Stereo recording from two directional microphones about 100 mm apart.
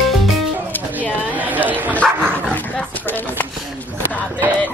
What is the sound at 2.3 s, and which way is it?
Speech, 15° left (ahead or behind).